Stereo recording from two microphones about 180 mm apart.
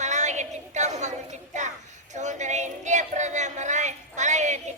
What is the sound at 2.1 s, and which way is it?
Speech, 40° right (ahead or behind).